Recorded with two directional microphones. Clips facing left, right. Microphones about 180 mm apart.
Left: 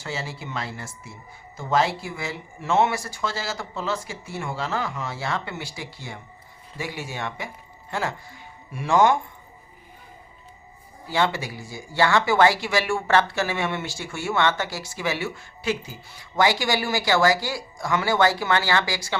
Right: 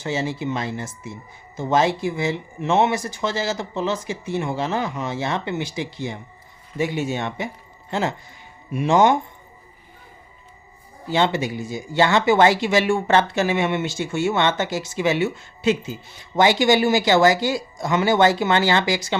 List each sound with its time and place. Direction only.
0.0 s speech: 20° right (ahead or behind)
11.1 s speech: 20° right (ahead or behind)